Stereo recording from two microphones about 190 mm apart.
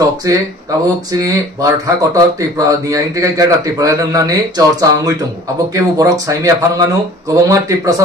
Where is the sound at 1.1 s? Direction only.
15° right (ahead or behind).